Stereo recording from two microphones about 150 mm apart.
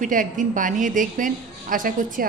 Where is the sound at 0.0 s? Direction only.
60° right (ahead or behind).